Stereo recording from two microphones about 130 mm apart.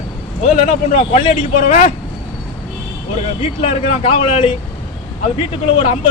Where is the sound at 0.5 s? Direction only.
60° left (ahead or behind).